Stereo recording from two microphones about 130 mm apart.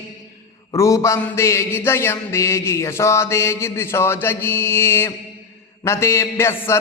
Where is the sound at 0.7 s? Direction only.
25° left (ahead or behind).